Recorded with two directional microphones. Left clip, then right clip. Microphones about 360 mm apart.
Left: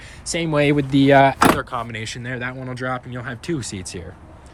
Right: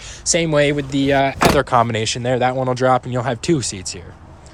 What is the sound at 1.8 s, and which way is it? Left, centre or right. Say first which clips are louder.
Speech: right 10 dB; centre.